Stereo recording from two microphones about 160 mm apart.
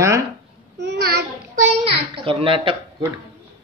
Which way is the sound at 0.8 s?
90° right.